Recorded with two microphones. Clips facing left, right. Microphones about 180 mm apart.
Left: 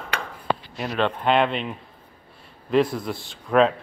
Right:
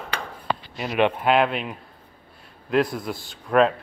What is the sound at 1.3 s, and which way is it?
Speech, 5° right (ahead or behind).